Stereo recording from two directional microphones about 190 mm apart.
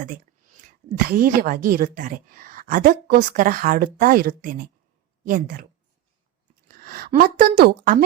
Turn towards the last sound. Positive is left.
turn(degrees=-55)  # may be behind; listen again after turning